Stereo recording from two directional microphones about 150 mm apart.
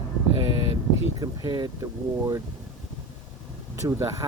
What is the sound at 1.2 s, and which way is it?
Speech, 30° right (ahead or behind).